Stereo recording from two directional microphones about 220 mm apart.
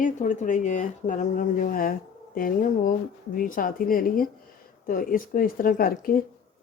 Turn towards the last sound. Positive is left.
turn(degrees=40)  # may be behind; listen again after turning